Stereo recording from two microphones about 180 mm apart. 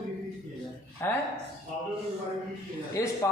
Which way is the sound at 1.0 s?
10° left (ahead or behind).